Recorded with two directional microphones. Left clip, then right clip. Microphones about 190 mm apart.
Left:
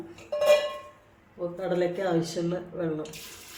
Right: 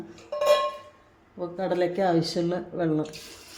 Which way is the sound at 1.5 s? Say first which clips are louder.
Right 3 dB; 50° right (ahead or behind).